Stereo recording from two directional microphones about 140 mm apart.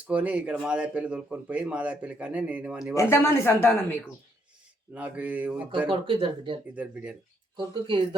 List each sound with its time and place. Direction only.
0.0 s speech: 10° right (ahead or behind)
2.9 s speech: 20° left (ahead or behind)
4.9 s speech: 10° right (ahead or behind)
5.9 s speech: 40° right (ahead or behind)
6.7 s speech: 10° right (ahead or behind)
7.5 s speech: 35° right (ahead or behind)